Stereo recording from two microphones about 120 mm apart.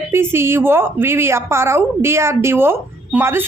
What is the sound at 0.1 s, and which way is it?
A woman's voice, 20° right (ahead or behind).